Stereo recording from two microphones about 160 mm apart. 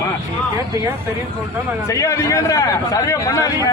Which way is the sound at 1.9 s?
20° left (ahead or behind).